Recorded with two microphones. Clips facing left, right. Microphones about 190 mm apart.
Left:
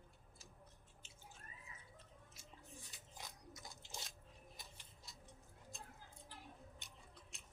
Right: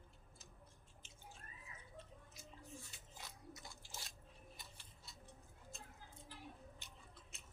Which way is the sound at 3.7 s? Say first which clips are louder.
Left 2 dB; 20° left (ahead or behind).